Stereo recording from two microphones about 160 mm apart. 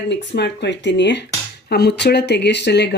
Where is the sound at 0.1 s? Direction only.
90° left.